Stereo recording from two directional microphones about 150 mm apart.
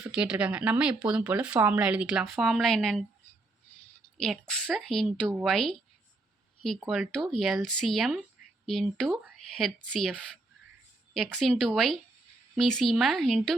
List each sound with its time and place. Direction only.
0.1 s speech: 5° right (ahead or behind)
4.2 s speech: centre (ahead or behind)
6.7 s speech: 5° right (ahead or behind)